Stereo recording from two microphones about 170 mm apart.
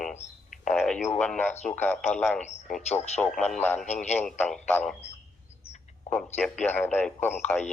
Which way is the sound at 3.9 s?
45° left (ahead or behind).